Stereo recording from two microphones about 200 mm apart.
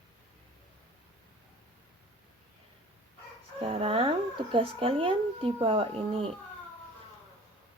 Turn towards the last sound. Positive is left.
turn(degrees=-30)  # may be behind; listen again after turning